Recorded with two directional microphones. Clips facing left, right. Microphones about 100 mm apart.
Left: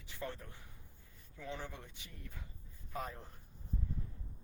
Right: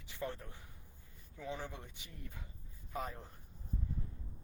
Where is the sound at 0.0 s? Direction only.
15° right (ahead or behind).